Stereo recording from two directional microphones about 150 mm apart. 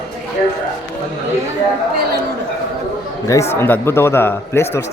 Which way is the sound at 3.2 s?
20° left (ahead or behind).